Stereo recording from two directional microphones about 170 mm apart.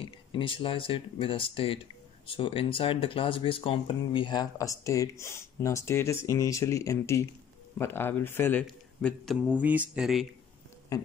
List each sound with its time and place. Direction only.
0.0 s speech: 30° left (ahead or behind); by 8.6 s 10° left (ahead or behind)
8.6 s a man's voice: centre (ahead or behind)
9.6 s speech: 10° right (ahead or behind)